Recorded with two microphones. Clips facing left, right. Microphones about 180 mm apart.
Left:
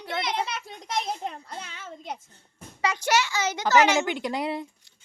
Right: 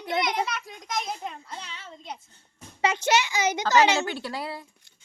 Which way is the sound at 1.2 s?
45° left (ahead or behind).